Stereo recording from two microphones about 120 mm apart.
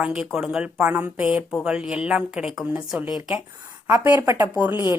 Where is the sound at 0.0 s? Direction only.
5° right (ahead or behind).